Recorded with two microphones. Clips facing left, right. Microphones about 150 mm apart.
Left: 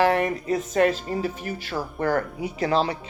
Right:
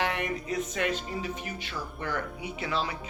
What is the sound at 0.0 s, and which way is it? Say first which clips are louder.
Speech: left 10 dB; 40° left (ahead or behind).